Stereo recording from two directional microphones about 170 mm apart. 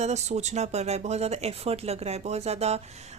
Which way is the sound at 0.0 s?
40° right (ahead or behind).